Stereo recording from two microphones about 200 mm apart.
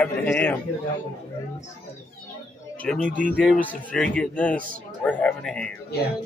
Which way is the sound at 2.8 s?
5° left (ahead or behind).